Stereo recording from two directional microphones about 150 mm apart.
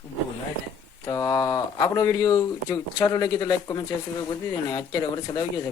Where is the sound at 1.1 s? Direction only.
25° left (ahead or behind).